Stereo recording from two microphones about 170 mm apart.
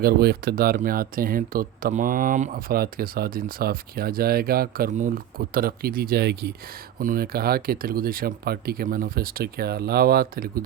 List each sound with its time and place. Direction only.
0.0 s speech: 65° right (ahead or behind)
7.0 s speech: 60° right (ahead or behind)